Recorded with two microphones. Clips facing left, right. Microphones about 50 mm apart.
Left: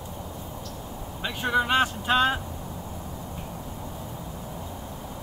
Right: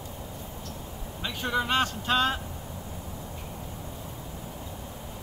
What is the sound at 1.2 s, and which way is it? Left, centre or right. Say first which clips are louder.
Speech: left 4 dB; centre.